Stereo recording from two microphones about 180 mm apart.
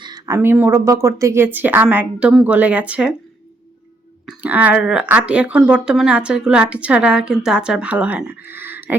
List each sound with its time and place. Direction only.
0.0 s a sound: 20° right (ahead or behind)
0.3 s speech: 10° right (ahead or behind)
4.3 s speech: 10° right (ahead or behind)